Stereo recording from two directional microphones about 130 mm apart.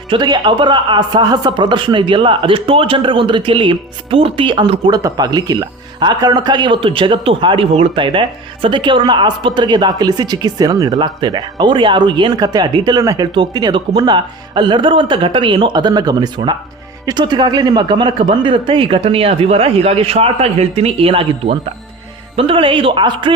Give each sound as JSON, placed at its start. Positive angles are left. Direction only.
{"t": 0.1, "sound": "speech", "side_deg": -35}
{"t": 4.9, "sound": "speech", "side_deg": -30}